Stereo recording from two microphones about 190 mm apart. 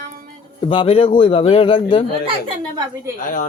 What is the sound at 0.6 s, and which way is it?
Speech, 25° left (ahead or behind).